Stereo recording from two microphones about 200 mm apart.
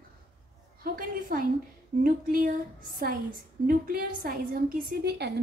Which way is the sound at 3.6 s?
45° right (ahead or behind).